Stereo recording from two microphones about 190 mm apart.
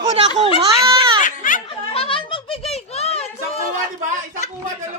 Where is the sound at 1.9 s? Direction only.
30° left (ahead or behind).